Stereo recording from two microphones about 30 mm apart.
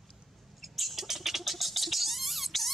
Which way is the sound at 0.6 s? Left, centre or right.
Centre.